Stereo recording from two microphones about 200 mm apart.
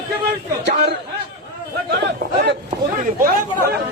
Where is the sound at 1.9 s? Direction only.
55° right (ahead or behind).